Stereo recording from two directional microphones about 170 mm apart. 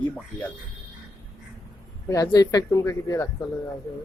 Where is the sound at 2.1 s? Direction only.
20° left (ahead or behind).